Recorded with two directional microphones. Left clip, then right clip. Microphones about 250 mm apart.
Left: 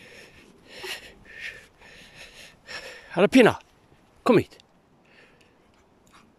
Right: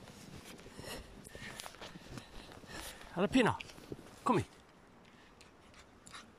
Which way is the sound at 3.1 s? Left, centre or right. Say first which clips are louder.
Left 14 dB; left.